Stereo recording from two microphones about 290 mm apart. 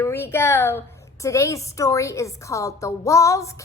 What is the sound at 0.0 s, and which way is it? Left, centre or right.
A woman's voice, centre.